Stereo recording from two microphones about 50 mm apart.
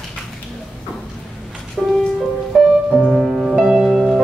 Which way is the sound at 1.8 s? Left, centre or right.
Centre.